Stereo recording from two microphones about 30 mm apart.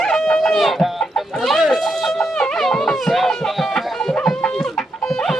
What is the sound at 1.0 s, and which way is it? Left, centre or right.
Chicken, centre.